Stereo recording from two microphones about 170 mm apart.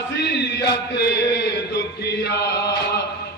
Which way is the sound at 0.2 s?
75° left (ahead or behind).